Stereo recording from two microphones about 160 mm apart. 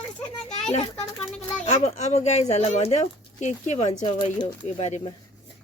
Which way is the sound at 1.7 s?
45° left (ahead or behind).